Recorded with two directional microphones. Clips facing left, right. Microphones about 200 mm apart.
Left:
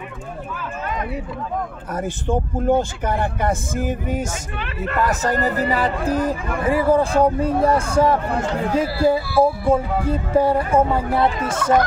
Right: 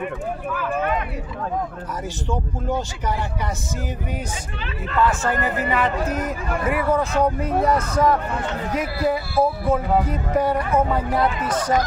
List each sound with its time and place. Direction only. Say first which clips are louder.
1.9 s speech: left 4 dB; 55° left (ahead or behind)
5.0 s speech: left 1 dB; 40° left (ahead or behind)